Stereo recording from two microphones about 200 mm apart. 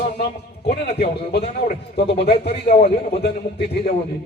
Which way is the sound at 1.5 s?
30° left (ahead or behind).